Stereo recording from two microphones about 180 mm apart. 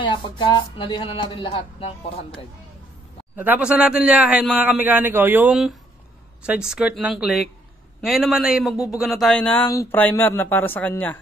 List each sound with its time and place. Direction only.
0.0 s speech: 25° left (ahead or behind)
3.3 s a man's voice: 10° right (ahead or behind); by 11.1 s 10° left (ahead or behind)